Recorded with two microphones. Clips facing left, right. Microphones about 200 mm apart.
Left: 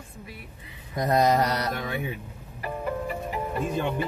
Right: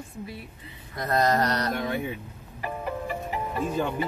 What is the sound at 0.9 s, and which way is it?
Speech, 15° left (ahead or behind).